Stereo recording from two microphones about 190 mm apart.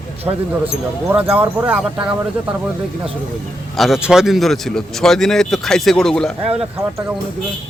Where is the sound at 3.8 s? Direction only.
Centre (ahead or behind).